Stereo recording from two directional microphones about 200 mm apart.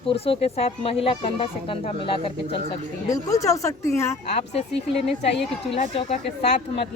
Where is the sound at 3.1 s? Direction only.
15° left (ahead or behind).